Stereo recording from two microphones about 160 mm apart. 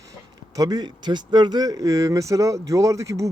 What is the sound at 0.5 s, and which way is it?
Speech, 25° right (ahead or behind).